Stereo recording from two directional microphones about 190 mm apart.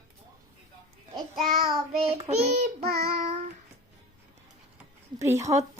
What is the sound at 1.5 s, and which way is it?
Child singing, 50° right (ahead or behind).